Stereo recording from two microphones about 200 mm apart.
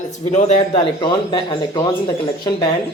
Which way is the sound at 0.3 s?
35° left (ahead or behind).